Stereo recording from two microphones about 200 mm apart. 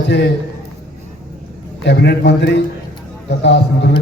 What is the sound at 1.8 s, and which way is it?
A man's voice, 60° left (ahead or behind).